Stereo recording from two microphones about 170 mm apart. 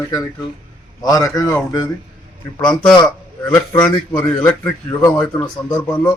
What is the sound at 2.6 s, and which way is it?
Speech, 5° left (ahead or behind).